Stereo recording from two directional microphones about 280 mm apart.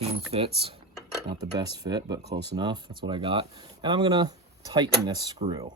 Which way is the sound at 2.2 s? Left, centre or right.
Right.